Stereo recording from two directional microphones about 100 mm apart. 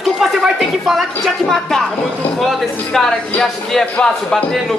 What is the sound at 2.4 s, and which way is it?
Speech, centre (ahead or behind).